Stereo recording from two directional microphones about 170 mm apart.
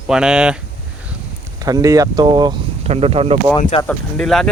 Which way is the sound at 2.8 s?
35° right (ahead or behind).